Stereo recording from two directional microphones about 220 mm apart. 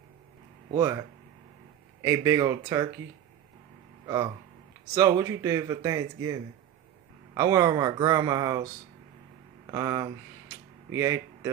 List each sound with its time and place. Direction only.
0.7 s speech: 15° right (ahead or behind)
4.0 s a sound: 15° right (ahead or behind)
4.9 s speech: 15° right (ahead or behind)
7.3 s speech: 15° right (ahead or behind)
9.7 s speech: 15° right (ahead or behind)